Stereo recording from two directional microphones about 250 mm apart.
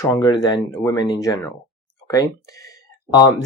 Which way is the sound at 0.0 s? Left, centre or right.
Centre.